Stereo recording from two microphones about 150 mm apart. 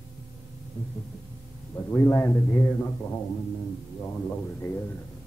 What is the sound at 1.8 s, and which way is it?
A man's voice, 15° left (ahead or behind).